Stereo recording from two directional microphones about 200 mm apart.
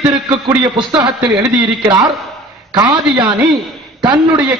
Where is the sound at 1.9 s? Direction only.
20° right (ahead or behind).